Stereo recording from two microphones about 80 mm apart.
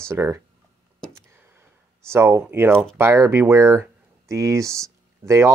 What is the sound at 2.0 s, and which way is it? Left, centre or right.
Speech, right.